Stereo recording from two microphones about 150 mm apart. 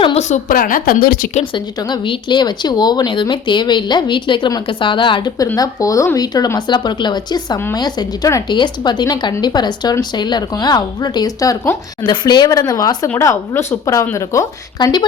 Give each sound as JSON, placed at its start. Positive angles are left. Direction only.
{"t": 0.0, "sound": "a woman's voice", "side_deg": 45}
{"t": 1.5, "sound": "speech", "side_deg": 30}